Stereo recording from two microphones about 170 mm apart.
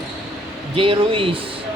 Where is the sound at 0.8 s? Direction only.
30° right (ahead or behind).